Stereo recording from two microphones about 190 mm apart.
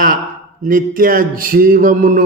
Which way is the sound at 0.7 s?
45° right (ahead or behind).